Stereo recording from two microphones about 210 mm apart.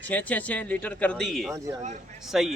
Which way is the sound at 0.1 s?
10° left (ahead or behind).